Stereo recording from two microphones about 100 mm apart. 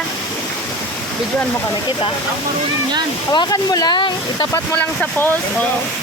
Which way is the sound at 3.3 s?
40° left (ahead or behind).